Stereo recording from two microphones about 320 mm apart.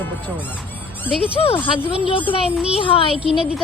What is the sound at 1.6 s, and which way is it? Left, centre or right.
Speech, centre.